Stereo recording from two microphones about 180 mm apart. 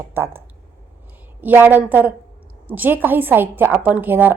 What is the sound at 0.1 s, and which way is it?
A woman's voice, 15° right (ahead or behind).